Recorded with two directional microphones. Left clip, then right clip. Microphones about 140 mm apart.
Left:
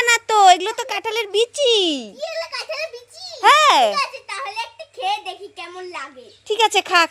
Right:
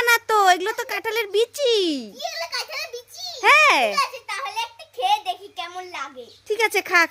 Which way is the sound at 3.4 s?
Centre (ahead or behind).